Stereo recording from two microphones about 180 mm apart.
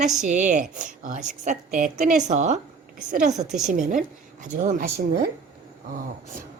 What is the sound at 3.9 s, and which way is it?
Speech, 45° right (ahead or behind).